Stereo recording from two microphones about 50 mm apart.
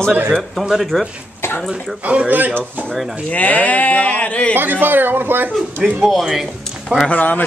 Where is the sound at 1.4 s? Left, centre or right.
Left.